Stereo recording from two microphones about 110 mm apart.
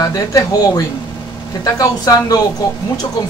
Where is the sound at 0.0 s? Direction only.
35° left (ahead or behind).